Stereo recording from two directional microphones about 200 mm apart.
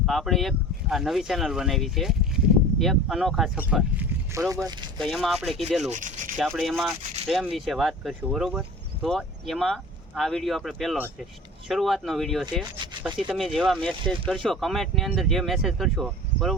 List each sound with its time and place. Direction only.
0.0 s speech: centre (ahead or behind); by 5.0 s 20° right (ahead or behind)
5.0 s speech: centre (ahead or behind)
5.9 s rub: 40° right (ahead or behind)
6.3 s speech: centre (ahead or behind)